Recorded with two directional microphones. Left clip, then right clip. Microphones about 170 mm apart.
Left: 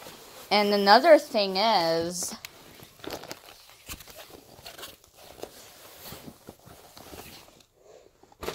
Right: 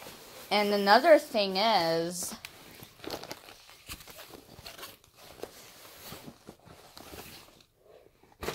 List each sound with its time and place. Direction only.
0.5 s a woman's voice: 30° left (ahead or behind)
3.0 s biting: 20° left (ahead or behind)